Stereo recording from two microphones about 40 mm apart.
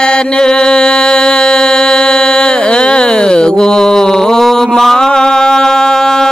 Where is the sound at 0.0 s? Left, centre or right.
Left.